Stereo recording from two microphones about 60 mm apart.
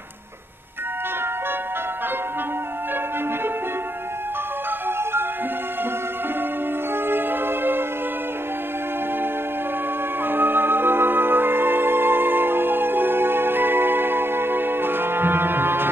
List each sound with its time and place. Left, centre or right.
7.1 s music: right
10.2 s music: right